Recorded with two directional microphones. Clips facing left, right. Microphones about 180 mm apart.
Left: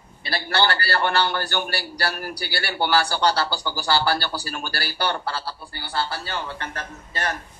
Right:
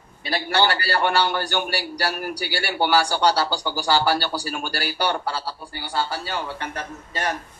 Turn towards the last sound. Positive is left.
turn(degrees=-10)  # may be behind; listen again after turning